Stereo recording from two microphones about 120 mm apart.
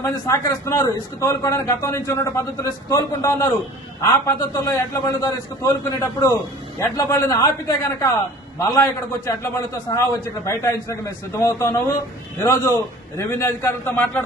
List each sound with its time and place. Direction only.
0.0 s a man's voice: 25° left (ahead or behind)
4.5 s a man's voice: 25° left (ahead or behind)